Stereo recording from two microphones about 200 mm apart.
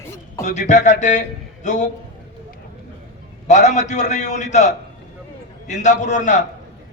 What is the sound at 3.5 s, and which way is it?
A man's voice, 35° left (ahead or behind).